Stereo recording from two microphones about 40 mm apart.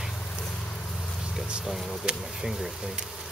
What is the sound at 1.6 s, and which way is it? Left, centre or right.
Speech, centre.